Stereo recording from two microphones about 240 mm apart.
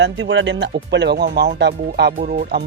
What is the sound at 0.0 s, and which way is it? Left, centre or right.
Speech, right.